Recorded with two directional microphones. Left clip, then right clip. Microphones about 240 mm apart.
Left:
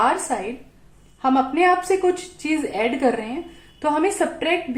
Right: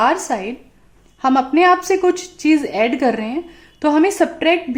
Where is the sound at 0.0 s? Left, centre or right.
Right.